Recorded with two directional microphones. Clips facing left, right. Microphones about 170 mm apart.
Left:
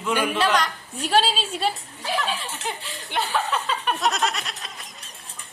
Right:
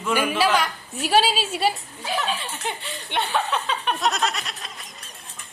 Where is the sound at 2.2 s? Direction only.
Centre (ahead or behind).